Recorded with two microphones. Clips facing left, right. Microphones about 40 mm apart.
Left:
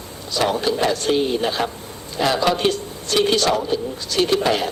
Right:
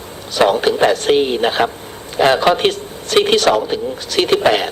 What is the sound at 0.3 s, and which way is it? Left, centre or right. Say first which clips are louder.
A man's voice: right 6 dB; right.